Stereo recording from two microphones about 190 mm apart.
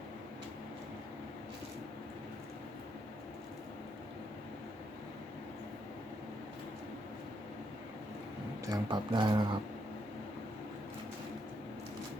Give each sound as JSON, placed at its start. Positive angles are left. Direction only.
{"t": 8.6, "sound": "speech", "side_deg": -20}